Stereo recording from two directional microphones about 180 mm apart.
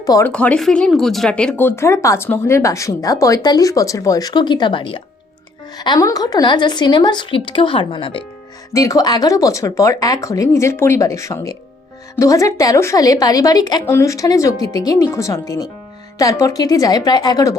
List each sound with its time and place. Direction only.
0.0 s speech: 20° left (ahead or behind)
0.3 s speech: 5° left (ahead or behind); by 8.2 s 30° left (ahead or behind)
8.7 s speech: 20° left (ahead or behind)